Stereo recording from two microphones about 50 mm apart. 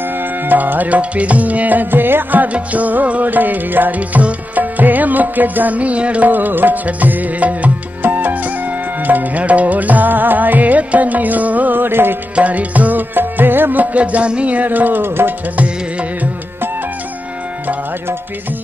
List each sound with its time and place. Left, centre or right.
0.5 s music: right
2.4 s music: right
6.3 s music: right
12.4 s music: right
13.9 s music: right
15.5 s music: right